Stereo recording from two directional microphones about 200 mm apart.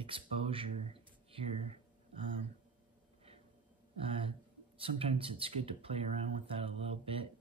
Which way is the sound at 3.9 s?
25° right (ahead or behind).